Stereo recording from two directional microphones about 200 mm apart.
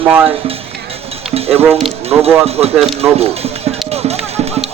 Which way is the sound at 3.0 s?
30° right (ahead or behind).